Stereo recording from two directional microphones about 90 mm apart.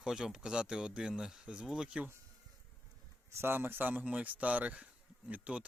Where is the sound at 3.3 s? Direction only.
30° right (ahead or behind).